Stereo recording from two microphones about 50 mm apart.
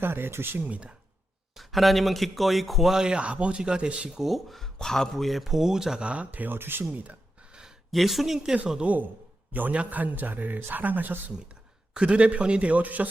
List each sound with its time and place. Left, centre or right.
0.0 s speech: right
0.6 s a man's voice: right
1.5 s a man's voice: centre; by 4.2 s right
4.2 s a man's voice: centre
6.0 s a man's voice: right
6.6 s speech: right
6.9 s a man's voice: right
7.5 s a sound: centre
7.9 s a man's voice: centre
8.9 s a man's voice: right
11.9 s a man's voice: right